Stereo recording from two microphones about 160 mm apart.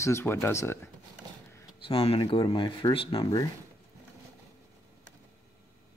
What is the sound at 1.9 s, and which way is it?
Speech, 35° left (ahead or behind).